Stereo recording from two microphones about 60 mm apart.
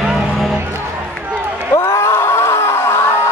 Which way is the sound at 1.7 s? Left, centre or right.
Left.